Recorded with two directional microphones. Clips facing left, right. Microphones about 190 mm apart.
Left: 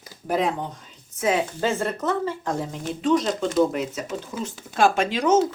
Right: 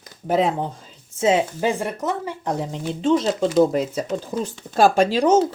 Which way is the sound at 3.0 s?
25° right (ahead or behind).